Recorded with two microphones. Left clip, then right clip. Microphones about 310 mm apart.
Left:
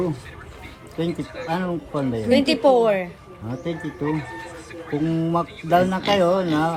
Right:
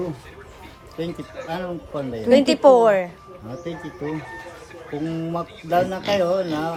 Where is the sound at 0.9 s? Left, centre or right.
Centre.